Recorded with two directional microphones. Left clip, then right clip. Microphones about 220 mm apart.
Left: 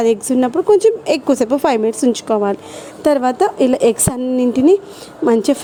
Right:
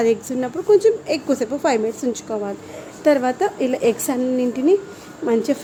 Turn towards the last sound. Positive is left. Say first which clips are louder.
# left 5 dB
turn(degrees=35)  # may be behind; listen again after turning